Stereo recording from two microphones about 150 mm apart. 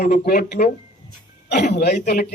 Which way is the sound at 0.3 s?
90° left.